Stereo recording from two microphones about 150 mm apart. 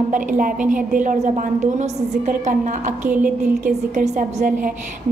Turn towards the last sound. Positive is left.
turn(degrees=-55)  # may be behind; listen again after turning